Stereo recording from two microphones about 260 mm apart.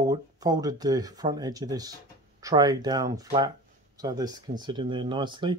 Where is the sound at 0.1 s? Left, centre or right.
Centre.